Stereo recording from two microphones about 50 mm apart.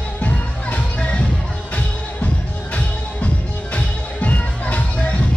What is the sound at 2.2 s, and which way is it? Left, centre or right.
Music, left.